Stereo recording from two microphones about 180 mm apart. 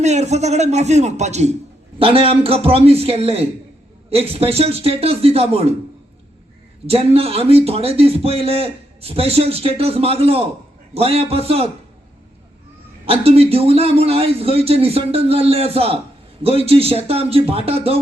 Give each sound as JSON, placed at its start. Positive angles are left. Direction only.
{"t": 0.0, "sound": "a man's voice", "side_deg": -40}
{"t": 6.8, "sound": "a man's voice", "side_deg": -35}
{"t": 13.1, "sound": "a man's voice", "side_deg": -35}